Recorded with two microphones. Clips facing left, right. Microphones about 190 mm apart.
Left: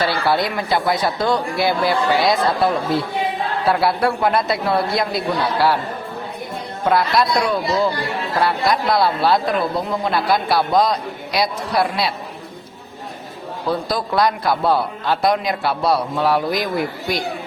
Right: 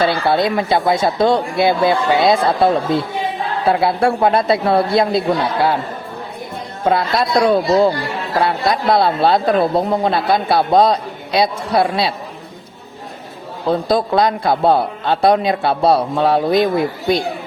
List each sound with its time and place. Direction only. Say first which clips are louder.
0.0 s speech: right 4 dB; 25° right (ahead or behind)
6.8 s speech: right 1 dB; 25° right (ahead or behind)
13.7 s speech: right 6 dB; 25° right (ahead or behind)